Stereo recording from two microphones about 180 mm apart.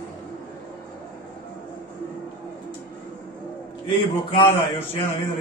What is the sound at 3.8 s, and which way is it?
A man's voice, 30° left (ahead or behind).